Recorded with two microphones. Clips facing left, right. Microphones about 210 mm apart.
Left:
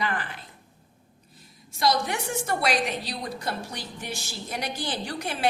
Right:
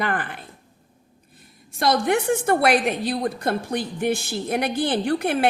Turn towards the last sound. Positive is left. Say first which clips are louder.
# right 7 dB
turn(degrees=-60)  # may be behind; listen again after turning